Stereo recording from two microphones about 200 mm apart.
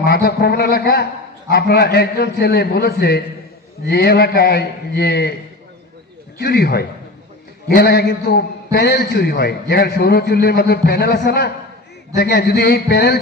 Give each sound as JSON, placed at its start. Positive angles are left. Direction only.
{"t": 0.0, "sound": "a man's voice", "side_deg": 50}
{"t": 6.4, "sound": "a man's voice", "side_deg": 55}